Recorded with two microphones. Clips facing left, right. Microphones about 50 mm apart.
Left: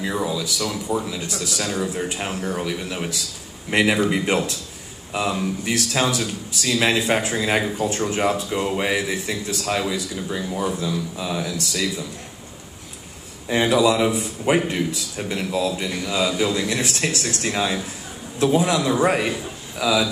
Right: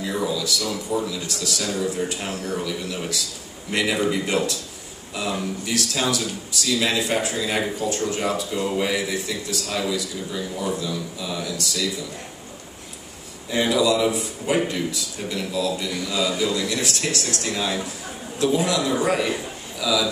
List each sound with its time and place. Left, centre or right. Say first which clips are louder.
0.2 s a man's voice: even; left
13.5 s a man's voice: left 2 dB; left